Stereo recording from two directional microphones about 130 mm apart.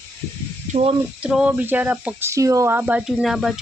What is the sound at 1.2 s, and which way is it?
Speech, 10° right (ahead or behind).